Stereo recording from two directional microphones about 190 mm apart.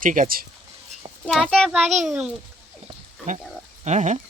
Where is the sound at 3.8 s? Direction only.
40° right (ahead or behind).